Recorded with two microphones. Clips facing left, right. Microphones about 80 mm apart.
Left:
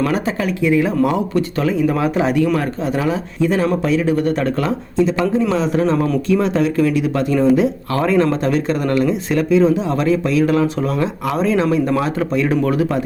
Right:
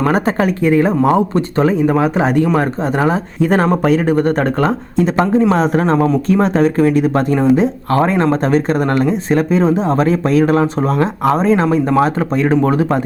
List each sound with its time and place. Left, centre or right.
0.0 s speech: right